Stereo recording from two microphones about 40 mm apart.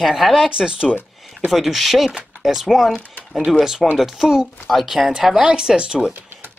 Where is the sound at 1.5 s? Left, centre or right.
Centre.